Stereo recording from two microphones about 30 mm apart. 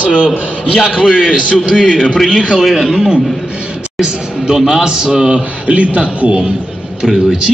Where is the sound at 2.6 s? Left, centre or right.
Centre.